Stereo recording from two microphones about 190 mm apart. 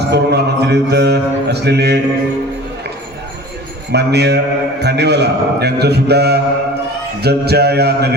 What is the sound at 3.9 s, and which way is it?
A man's voice, 60° right (ahead or behind).